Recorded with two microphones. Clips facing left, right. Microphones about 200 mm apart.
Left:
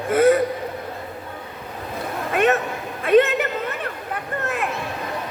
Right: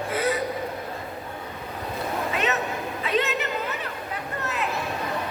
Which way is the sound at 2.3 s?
50° left (ahead or behind).